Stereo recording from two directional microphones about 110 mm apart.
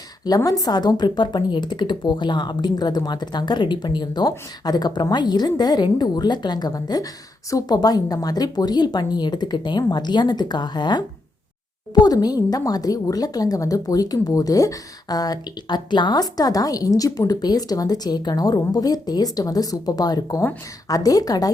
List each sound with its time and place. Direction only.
0.3 s a woman's voice: 35° left (ahead or behind)
12.0 s a woman's voice: 35° left (ahead or behind)